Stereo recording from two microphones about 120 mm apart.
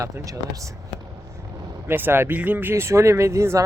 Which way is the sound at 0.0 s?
25° right (ahead or behind).